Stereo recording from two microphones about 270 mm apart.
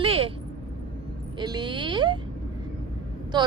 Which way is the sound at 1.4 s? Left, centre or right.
Centre.